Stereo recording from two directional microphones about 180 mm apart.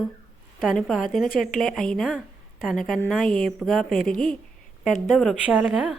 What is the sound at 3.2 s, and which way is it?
Speech, 50° left (ahead or behind).